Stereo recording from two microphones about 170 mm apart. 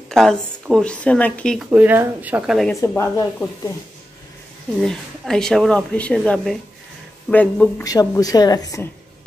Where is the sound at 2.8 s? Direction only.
20° left (ahead or behind).